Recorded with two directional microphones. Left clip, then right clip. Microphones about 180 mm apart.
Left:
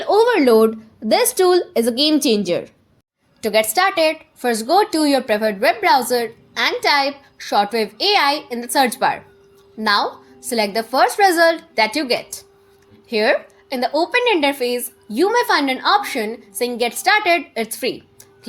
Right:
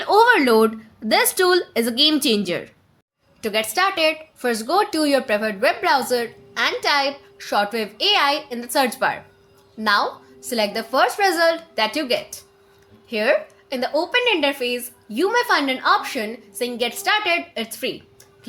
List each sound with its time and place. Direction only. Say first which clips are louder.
0.0 s speech: even; 5° right (ahead or behind)
3.4 s a woman's voice: left 4 dB; 20° left (ahead or behind)